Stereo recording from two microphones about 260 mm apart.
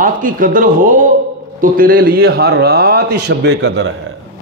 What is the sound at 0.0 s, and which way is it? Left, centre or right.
A man's voice, right.